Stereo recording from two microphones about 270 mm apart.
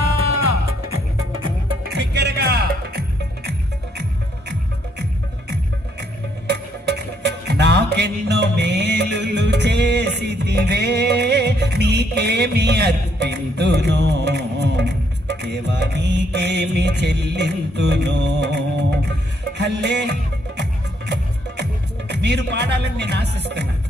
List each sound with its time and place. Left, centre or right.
1.8 s music: right
6.5 s music: right
21.6 s music: right